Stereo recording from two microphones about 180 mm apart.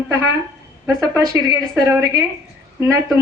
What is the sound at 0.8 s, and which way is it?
A woman's voice, 15° right (ahead or behind).